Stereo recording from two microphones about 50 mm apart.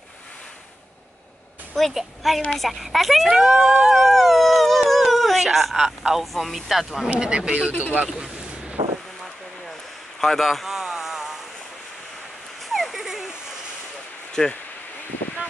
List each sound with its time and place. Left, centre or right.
1.8 s speech: centre
3.9 s dog: centre
6.0 s speech: centre
7.2 s speech: centre
10.2 s a sound: centre
12.6 s a sound: centre
14.4 s speech: centre